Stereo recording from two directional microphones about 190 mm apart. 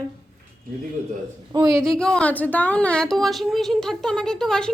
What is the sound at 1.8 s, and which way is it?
Speech, 5° left (ahead or behind).